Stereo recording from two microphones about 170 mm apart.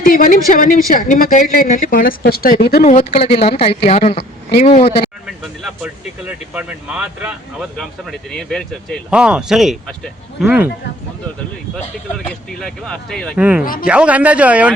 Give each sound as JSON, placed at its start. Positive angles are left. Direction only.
{"t": 0.0, "sound": "a woman's voice", "side_deg": 50}
{"t": 2.8, "sound": "speech", "side_deg": 40}
{"t": 5.2, "sound": "speech", "side_deg": -5}
{"t": 12.1, "sound": "speech", "side_deg": 5}
{"t": 13.4, "sound": "speech", "side_deg": -10}